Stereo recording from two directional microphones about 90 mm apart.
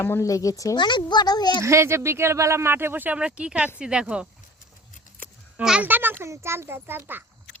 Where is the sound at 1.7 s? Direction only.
30° right (ahead or behind); by 4.3 s 10° right (ahead or behind).